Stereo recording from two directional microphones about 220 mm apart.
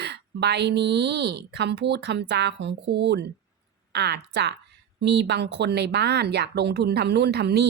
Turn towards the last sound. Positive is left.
turn(degrees=-50)  # may be behind; listen again after turning